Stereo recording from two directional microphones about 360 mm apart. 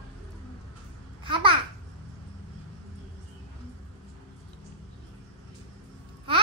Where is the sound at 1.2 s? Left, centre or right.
Centre.